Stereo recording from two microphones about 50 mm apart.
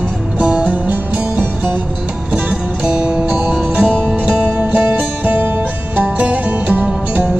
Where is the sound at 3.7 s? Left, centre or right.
Right.